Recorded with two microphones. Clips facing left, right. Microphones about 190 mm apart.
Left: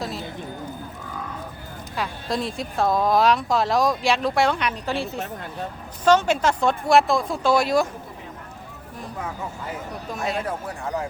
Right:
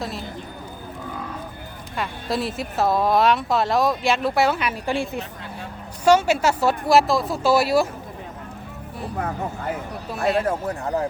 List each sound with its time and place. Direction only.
0.0 s clip-clop: centre (ahead or behind)
2.0 s speech: 5° right (ahead or behind)
9.1 s speech: 60° right (ahead or behind)
10.3 s a man's voice: 35° right (ahead or behind)